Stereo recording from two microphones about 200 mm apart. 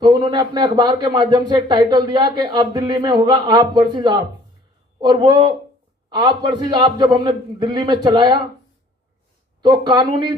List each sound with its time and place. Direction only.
0.0 s speech: 20° right (ahead or behind)
9.6 s speech: 20° right (ahead or behind)